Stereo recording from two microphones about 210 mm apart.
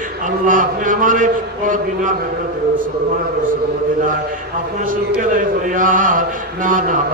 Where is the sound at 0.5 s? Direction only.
40° right (ahead or behind).